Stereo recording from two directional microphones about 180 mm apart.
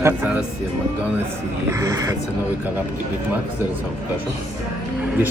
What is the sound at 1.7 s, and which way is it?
Speech, 20° right (ahead or behind).